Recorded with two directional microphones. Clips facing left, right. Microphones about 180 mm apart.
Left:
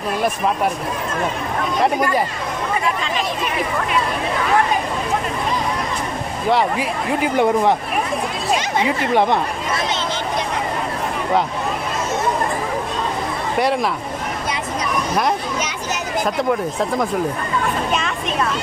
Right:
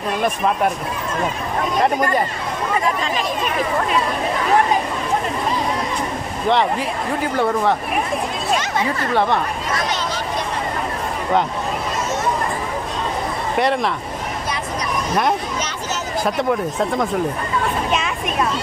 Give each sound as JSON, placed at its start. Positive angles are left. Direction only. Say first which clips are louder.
{"t": 7.3, "sound": "speech", "louder": "left 2 dB", "side_deg": 15}